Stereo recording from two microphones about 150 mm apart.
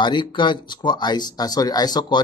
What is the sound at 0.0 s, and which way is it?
Speech, 30° left (ahead or behind).